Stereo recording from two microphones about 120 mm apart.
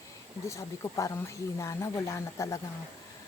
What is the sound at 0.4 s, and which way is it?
Speech, 25° left (ahead or behind).